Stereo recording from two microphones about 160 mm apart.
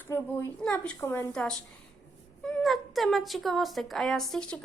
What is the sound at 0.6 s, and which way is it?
A woman's voice, 5° left (ahead or behind).